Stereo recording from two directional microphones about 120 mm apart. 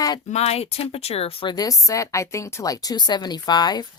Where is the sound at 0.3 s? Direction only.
60° left (ahead or behind).